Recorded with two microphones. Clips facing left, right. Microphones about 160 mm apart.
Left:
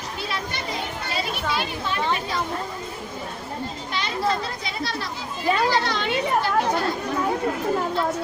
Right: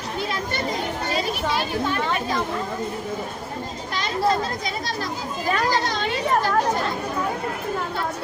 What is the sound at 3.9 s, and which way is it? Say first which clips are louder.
A woman's voice: right 3 dB; 45° right (ahead or behind).